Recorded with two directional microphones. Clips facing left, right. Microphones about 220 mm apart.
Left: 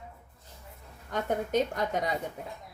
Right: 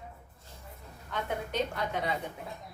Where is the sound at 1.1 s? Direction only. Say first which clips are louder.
Left 6 dB; 45° left (ahead or behind).